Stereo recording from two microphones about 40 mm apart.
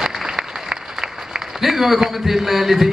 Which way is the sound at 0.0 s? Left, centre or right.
Centre.